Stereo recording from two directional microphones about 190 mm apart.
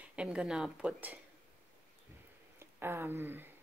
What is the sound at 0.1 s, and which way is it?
Speech, 5° right (ahead or behind).